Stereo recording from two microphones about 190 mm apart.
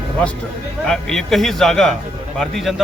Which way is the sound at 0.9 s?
5° left (ahead or behind).